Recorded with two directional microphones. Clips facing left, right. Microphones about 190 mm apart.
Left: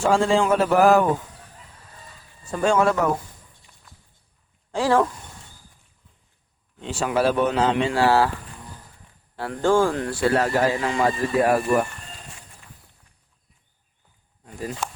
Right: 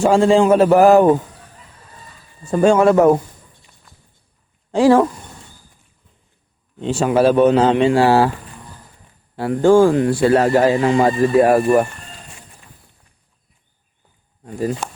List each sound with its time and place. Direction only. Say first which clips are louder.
0.0 s speech: right 7 dB; 15° right (ahead or behind)
2.4 s speech: right 7 dB; 25° right (ahead or behind)
4.7 s speech: right 8 dB; 15° right (ahead or behind)
6.8 s speech: right 7 dB; 25° right (ahead or behind)
9.3 s speech: right 8 dB; 15° right (ahead or behind); by 11.6 s 30° right (ahead or behind)